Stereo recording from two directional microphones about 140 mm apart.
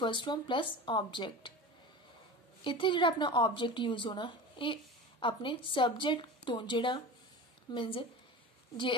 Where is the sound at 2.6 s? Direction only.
35° left (ahead or behind).